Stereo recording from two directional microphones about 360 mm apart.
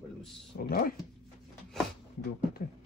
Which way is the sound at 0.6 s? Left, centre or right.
Left.